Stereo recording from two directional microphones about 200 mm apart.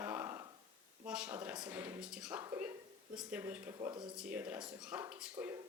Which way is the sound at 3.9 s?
20° right (ahead or behind).